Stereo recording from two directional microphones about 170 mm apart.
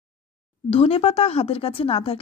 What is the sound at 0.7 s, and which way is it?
Speech, 35° left (ahead or behind).